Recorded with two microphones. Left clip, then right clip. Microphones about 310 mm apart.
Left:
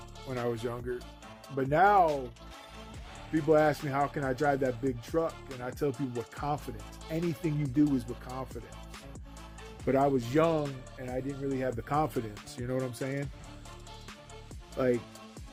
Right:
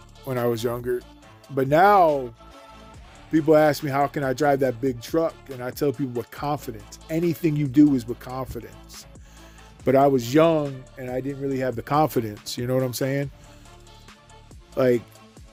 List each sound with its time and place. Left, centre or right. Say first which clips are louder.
0.3 s speech: right 9 dB; right
3.3 s speech: right 8 dB; right
5.9 s speech: right 8 dB; centre
6.3 s speech: right 6 dB; right
9.8 s speech: right 9 dB; right
14.8 s speech: right 9 dB; right